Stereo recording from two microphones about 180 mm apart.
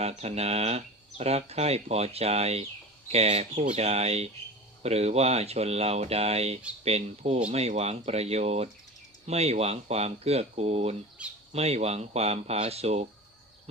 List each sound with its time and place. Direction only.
0.0 s speech: 35° right (ahead or behind)
11.2 s speech: 5° right (ahead or behind)
11.5 s speech: 35° right (ahead or behind)